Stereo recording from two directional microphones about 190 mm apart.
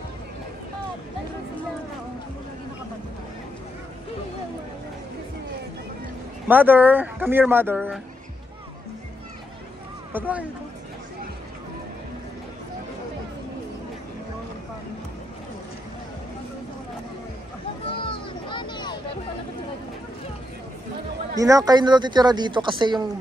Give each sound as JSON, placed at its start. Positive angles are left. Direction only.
{"t": 6.4, "sound": "speech", "side_deg": -10}
{"t": 10.1, "sound": "speech", "side_deg": -10}
{"t": 17.8, "sound": "music", "side_deg": 30}
{"t": 21.4, "sound": "speech", "side_deg": -20}